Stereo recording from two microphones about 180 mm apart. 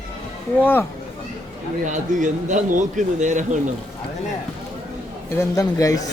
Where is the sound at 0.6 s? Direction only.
10° left (ahead or behind).